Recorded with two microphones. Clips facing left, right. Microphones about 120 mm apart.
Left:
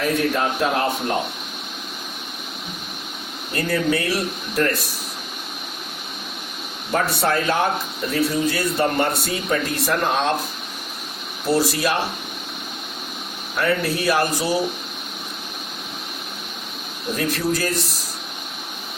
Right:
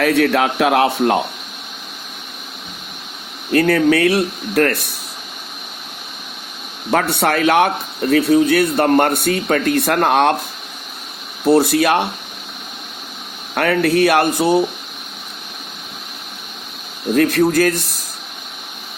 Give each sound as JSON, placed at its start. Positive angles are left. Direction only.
{"t": 0.0, "sound": "a man's voice", "side_deg": -75}
{"t": 3.5, "sound": "speech", "side_deg": -65}
{"t": 6.9, "sound": "speech", "side_deg": -70}
{"t": 11.4, "sound": "speech", "side_deg": -60}
{"t": 13.6, "sound": "speech", "side_deg": -65}
{"t": 17.2, "sound": "speech", "side_deg": -55}